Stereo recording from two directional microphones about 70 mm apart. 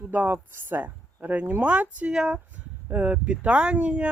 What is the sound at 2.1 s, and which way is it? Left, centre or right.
Speech, centre.